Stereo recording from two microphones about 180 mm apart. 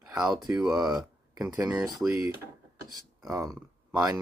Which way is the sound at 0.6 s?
5° right (ahead or behind).